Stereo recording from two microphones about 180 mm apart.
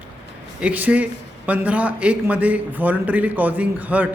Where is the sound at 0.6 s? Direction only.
10° right (ahead or behind).